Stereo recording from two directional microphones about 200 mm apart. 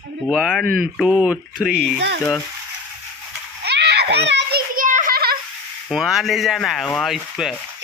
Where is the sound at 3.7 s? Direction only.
55° right (ahead or behind).